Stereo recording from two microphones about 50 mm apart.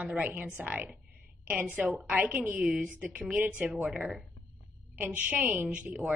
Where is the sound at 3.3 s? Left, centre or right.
Right.